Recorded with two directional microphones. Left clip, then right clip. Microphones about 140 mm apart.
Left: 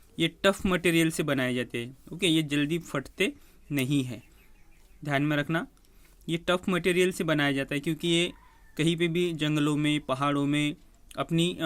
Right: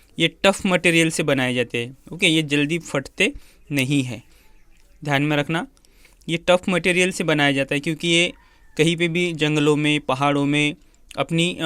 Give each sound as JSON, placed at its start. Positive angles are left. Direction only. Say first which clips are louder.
{"t": 0.2, "sound": "speech", "louder": "right 7 dB", "side_deg": -40}